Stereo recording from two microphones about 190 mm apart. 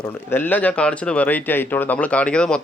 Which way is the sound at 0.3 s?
10° left (ahead or behind).